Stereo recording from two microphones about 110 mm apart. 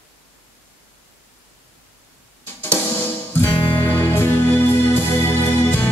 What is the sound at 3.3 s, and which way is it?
Music, 20° left (ahead or behind).